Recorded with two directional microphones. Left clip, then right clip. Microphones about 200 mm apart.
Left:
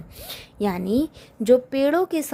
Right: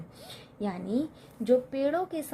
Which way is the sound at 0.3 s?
35° left (ahead or behind).